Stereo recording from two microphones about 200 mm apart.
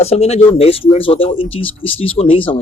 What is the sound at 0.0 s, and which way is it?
Speech, 30° left (ahead or behind).